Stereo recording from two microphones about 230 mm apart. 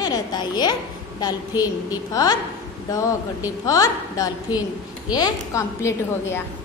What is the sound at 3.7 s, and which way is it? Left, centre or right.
A woman's voice, centre.